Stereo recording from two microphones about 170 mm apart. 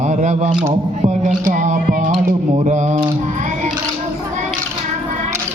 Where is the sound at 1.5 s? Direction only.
50° right (ahead or behind).